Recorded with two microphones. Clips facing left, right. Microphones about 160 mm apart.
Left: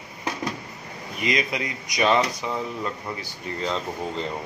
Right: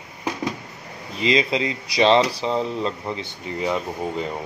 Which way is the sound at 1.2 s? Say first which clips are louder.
Right 5 dB; 25° right (ahead or behind).